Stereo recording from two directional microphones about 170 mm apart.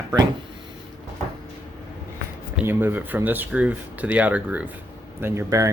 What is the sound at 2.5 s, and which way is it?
Speech, 10° right (ahead or behind).